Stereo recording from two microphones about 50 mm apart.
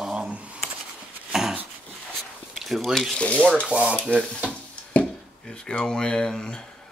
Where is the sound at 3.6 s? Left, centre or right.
Centre.